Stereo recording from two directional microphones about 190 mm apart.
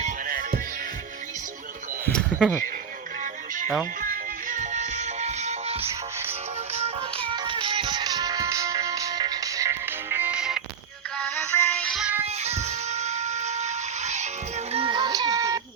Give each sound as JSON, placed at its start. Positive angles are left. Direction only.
{"t": 0.0, "sound": "music", "side_deg": -50}
{"t": 2.1, "sound": "speech", "side_deg": 5}
{"t": 4.0, "sound": "music", "side_deg": -45}
{"t": 11.2, "sound": "music", "side_deg": 10}
{"t": 12.2, "sound": "music", "side_deg": -35}